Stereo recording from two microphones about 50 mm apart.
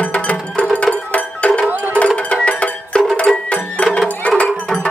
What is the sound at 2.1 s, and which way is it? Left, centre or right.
Music, left.